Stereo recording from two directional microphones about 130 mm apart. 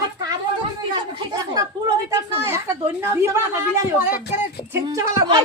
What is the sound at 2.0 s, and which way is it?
A woman's voice, 20° right (ahead or behind).